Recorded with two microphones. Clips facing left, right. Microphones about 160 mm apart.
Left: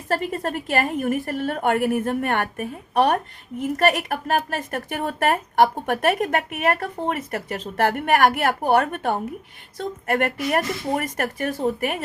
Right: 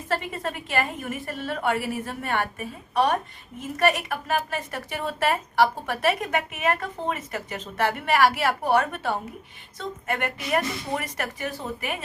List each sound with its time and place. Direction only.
0.1 s a woman's voice: 45° left (ahead or behind)